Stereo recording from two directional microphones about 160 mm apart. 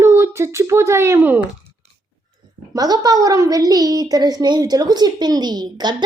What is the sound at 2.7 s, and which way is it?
A child's voice, 25° right (ahead or behind).